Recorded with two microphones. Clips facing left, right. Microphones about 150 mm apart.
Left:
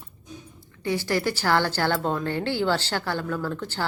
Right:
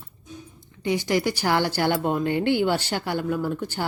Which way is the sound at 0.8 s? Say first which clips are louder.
Right 2 dB; 15° right (ahead or behind).